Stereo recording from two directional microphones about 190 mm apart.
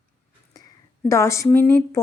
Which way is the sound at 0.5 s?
15° left (ahead or behind).